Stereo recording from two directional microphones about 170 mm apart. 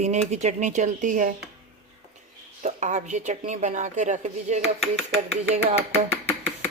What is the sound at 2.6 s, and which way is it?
A woman's voice, 45° right (ahead or behind).